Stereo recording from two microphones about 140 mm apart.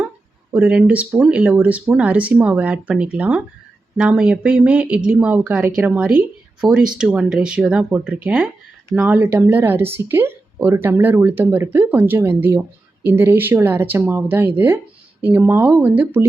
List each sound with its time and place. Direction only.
0.5 s speech: 10° right (ahead or behind)